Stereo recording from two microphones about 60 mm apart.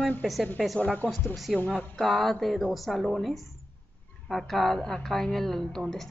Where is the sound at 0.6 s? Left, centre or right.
Centre.